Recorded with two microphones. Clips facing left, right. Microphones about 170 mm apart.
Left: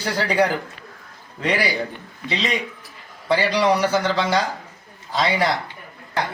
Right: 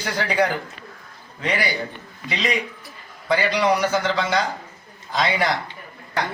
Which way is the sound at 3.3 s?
30° left (ahead or behind).